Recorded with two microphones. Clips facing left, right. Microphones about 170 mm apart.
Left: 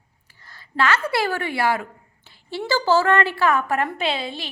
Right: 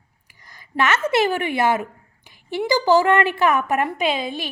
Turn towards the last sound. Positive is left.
turn(degrees=-15)  # may be behind; listen again after turning